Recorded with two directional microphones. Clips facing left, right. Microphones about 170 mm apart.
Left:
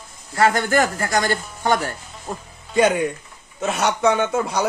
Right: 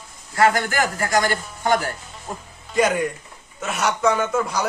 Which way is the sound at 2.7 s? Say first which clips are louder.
Left 2 dB; 30° left (ahead or behind).